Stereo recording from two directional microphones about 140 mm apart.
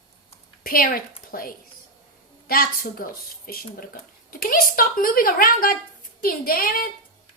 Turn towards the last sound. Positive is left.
turn(degrees=90)